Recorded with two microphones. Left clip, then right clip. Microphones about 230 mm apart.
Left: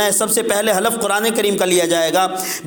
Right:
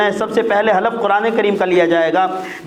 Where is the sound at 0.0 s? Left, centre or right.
Left.